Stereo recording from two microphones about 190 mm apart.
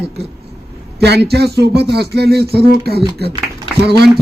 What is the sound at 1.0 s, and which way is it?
Speech, 60° right (ahead or behind).